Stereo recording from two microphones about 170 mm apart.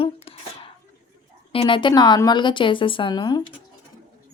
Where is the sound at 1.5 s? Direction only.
30° left (ahead or behind).